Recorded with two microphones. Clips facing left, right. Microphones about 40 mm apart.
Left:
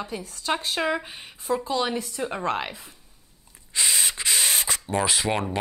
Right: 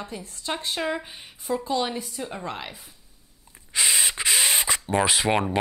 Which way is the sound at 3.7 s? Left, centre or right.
Centre.